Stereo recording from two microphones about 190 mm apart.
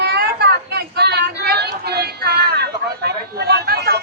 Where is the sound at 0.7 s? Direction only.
60° right (ahead or behind).